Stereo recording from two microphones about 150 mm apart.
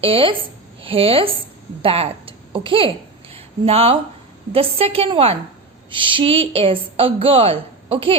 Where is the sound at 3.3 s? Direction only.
40° right (ahead or behind).